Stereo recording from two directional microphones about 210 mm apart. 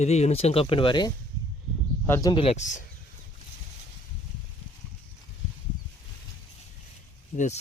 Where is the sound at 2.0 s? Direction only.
10° left (ahead or behind).